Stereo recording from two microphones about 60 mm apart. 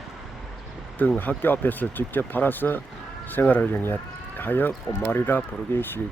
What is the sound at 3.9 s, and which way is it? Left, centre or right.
Sheep, left.